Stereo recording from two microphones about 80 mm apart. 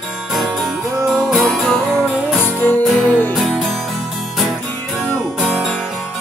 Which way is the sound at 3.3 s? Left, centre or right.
Centre.